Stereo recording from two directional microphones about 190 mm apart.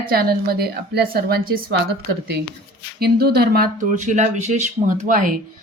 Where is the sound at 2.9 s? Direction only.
55° right (ahead or behind).